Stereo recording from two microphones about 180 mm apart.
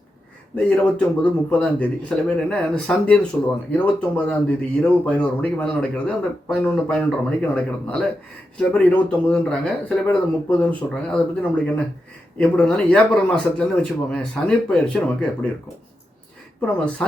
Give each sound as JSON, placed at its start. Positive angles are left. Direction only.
{"t": 0.5, "sound": "speech", "side_deg": 5}
{"t": 16.6, "sound": "speech", "side_deg": 5}